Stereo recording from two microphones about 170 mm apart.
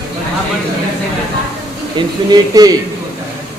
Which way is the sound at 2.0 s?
30° right (ahead or behind).